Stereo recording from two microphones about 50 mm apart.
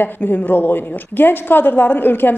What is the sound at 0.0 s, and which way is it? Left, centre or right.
A woman's voice, left.